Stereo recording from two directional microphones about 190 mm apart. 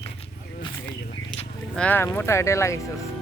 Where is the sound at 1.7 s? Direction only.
10° left (ahead or behind).